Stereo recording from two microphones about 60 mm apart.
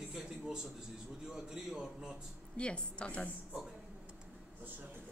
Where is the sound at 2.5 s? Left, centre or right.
Centre.